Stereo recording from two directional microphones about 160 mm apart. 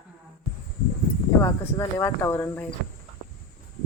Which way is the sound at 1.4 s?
20° left (ahead or behind).